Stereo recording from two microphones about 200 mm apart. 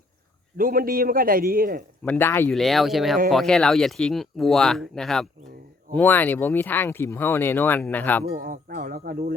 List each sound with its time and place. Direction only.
0.5 s a man's voice: 45° right (ahead or behind)
2.0 s speech: 10° left (ahead or behind)
8.3 s a man's voice: 45° right (ahead or behind)